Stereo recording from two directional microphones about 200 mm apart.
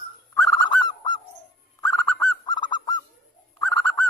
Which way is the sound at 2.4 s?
20° left (ahead or behind).